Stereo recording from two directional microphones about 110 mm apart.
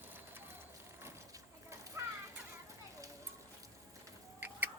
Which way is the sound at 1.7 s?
25° right (ahead or behind).